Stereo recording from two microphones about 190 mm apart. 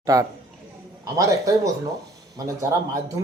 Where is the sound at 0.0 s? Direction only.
20° right (ahead or behind).